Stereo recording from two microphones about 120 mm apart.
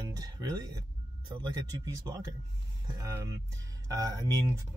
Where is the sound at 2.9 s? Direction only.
25° right (ahead or behind).